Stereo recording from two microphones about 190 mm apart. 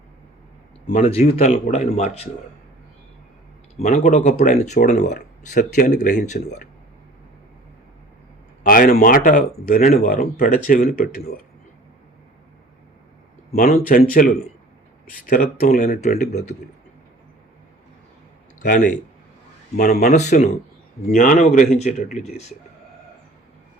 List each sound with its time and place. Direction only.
0.9 s speech: 45° left (ahead or behind)
1.1 s speech: 35° left (ahead or behind)
3.8 s speech: 35° left (ahead or behind)
8.6 s speech: 45° left (ahead or behind)
13.5 s speech: 40° left (ahead or behind)
18.6 s speech: 45° left (ahead or behind)